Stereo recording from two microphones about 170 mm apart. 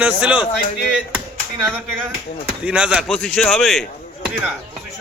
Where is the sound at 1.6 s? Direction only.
10° right (ahead or behind).